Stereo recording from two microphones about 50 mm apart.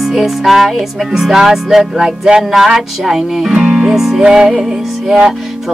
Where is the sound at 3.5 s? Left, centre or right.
Right.